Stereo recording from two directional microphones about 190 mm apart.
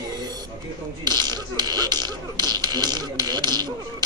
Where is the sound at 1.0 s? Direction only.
20° right (ahead or behind).